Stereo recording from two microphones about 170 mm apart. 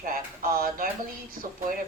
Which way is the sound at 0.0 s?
60° right (ahead or behind).